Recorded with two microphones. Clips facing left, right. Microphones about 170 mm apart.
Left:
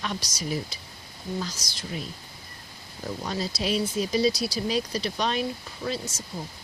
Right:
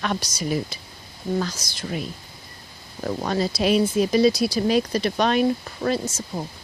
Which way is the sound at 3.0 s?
65° right (ahead or behind).